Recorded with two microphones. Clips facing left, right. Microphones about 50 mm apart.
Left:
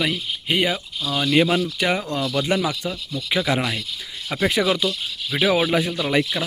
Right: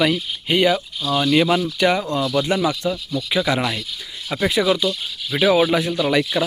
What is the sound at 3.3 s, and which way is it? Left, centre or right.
Speech, centre.